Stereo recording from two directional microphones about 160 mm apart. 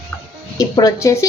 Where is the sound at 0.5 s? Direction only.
20° left (ahead or behind).